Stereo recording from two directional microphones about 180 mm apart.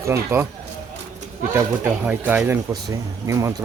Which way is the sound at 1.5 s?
10° right (ahead or behind).